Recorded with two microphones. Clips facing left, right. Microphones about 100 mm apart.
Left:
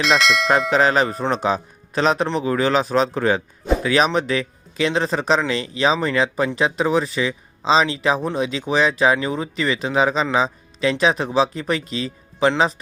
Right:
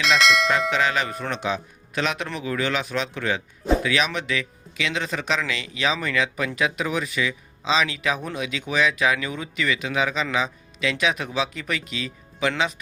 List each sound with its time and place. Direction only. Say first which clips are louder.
0.0 s speech: left 2 dB; centre (ahead or behind)
0.7 s speech: left 6 dB; 40° left (ahead or behind)